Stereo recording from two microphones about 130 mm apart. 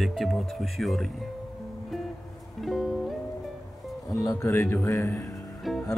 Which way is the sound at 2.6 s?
Centre (ahead or behind).